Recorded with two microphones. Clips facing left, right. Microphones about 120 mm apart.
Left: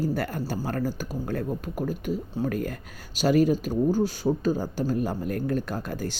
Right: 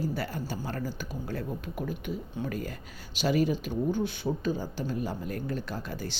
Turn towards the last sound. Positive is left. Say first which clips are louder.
# left 5 dB
turn(degrees=50)  # may be behind; listen again after turning